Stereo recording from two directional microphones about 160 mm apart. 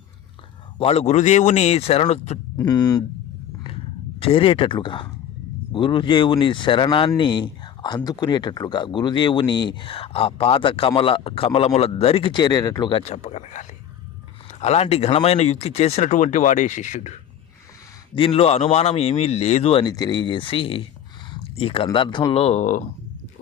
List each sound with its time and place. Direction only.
0.8 s speech: 40° left (ahead or behind)
2.6 s speech: 25° left (ahead or behind)
4.2 s speech: 35° left (ahead or behind)
18.1 s speech: 35° left (ahead or behind)
19.8 s speech: 25° left (ahead or behind); by 22.8 s 45° left (ahead or behind)